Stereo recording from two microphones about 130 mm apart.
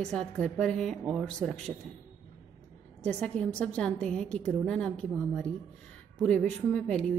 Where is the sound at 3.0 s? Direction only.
10° left (ahead or behind).